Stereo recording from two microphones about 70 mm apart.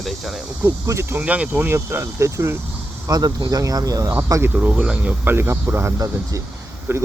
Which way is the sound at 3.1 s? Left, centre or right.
Right.